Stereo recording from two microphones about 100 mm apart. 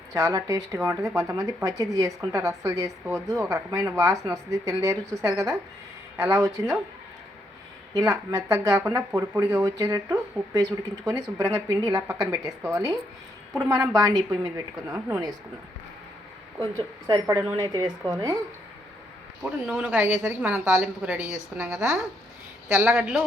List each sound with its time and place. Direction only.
0.1 s speech: 35° right (ahead or behind)
7.9 s speech: 35° right (ahead or behind)
9.6 s speech: 40° right (ahead or behind)
16.7 s speech: 40° right (ahead or behind)
19.5 s a woman's voice: 15° right (ahead or behind)